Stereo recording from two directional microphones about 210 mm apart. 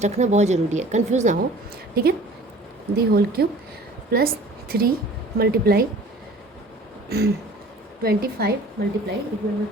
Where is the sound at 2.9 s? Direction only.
45° right (ahead or behind).